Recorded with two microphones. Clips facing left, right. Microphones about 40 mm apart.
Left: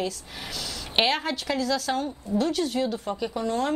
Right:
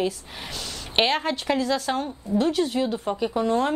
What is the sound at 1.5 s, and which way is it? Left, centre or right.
A woman's voice, right.